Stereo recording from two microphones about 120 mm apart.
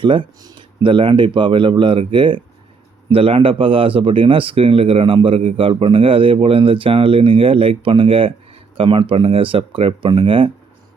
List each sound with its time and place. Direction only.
0.0 s speech: 45° right (ahead or behind)